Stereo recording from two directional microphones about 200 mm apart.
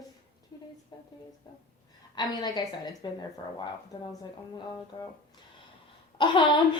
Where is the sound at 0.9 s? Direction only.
20° left (ahead or behind).